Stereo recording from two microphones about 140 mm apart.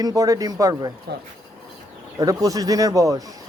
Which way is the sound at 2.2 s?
25° right (ahead or behind).